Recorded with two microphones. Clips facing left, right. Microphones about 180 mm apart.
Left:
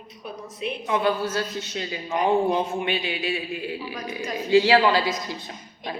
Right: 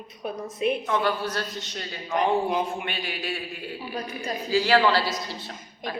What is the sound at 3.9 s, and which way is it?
Speech, 35° right (ahead or behind).